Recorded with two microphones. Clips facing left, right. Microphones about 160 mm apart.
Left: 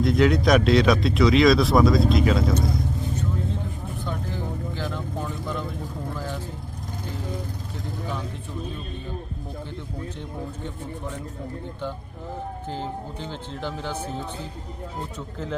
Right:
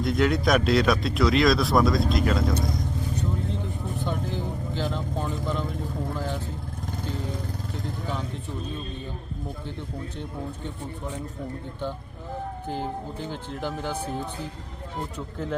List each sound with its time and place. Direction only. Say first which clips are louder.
0.0 s speech: left 3 dB; centre (ahead or behind)
4.0 s vehicle: right 1 dB; 20° right (ahead or behind)
12.6 s speech: right 2 dB; 15° right (ahead or behind)